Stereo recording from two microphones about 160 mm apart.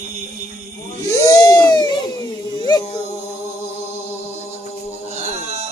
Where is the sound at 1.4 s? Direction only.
20° left (ahead or behind).